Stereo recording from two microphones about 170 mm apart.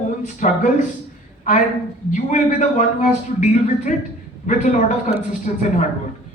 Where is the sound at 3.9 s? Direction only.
45° left (ahead or behind).